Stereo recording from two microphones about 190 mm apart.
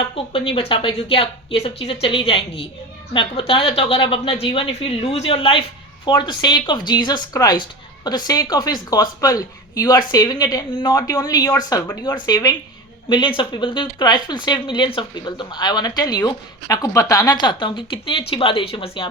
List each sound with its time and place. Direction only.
0.0 s speech: 30° left (ahead or behind)